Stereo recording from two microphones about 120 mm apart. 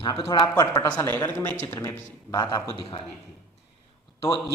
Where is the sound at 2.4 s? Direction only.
35° left (ahead or behind).